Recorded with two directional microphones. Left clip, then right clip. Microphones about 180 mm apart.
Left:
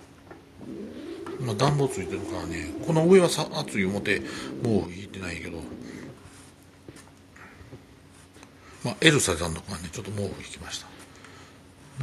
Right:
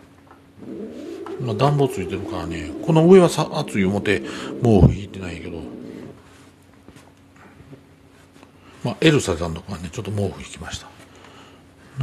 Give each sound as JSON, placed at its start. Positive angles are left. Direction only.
{"t": 1.4, "sound": "a man's voice", "side_deg": -15}
{"t": 8.8, "sound": "a man's voice", "side_deg": -15}